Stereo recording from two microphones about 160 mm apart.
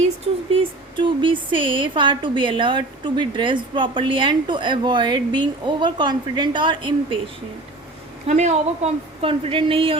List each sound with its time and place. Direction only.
0.5 s a woman's voice: 35° right (ahead or behind)
8.3 s a woman's voice: 45° right (ahead or behind)